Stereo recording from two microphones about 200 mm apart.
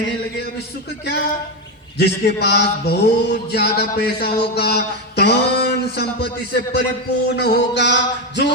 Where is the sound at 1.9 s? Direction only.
55° left (ahead or behind).